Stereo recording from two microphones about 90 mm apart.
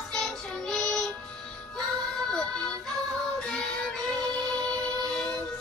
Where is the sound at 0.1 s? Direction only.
5° left (ahead or behind).